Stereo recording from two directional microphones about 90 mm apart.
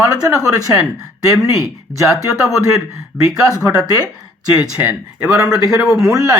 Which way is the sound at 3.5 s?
25° left (ahead or behind).